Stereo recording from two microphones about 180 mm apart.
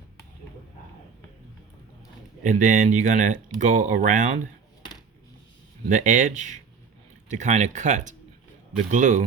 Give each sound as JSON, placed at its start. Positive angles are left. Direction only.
{"t": 2.4, "sound": "speech", "side_deg": -45}
{"t": 5.9, "sound": "speech", "side_deg": -45}